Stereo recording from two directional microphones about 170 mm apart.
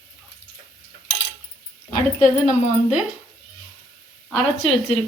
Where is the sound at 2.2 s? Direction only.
45° left (ahead or behind).